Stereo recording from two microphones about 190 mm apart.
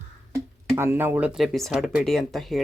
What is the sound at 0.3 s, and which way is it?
Speech, 10° right (ahead or behind).